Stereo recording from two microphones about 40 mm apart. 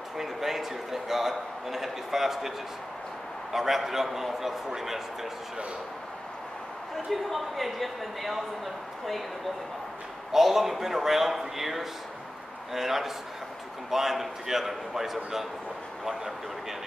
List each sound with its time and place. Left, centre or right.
0.2 s a man's voice: centre
3.5 s a man's voice: centre
7.1 s speech: centre
10.3 s a man's voice: centre